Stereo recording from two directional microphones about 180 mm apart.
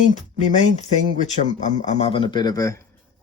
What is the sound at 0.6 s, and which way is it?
Speech, 40° left (ahead or behind).